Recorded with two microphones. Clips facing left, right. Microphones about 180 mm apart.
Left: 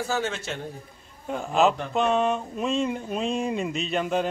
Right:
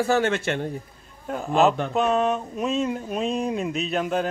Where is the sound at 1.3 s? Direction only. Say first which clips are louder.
Right 2 dB; centre (ahead or behind).